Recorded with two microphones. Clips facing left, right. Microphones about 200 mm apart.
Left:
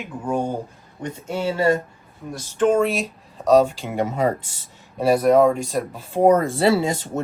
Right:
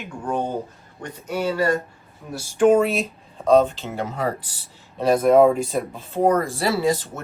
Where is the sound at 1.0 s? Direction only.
25° left (ahead or behind).